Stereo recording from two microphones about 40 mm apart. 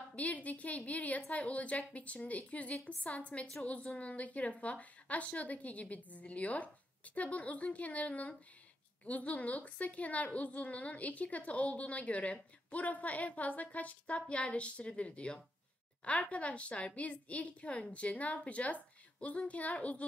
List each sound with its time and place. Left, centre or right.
0.1 s a woman's voice: left